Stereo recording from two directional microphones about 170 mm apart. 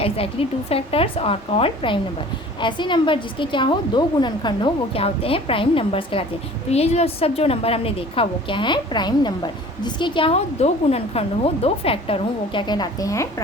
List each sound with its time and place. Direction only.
0.0 s a woman's voice: 35° left (ahead or behind)